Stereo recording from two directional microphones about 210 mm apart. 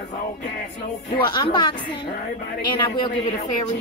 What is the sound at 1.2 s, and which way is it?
Speech, 20° left (ahead or behind).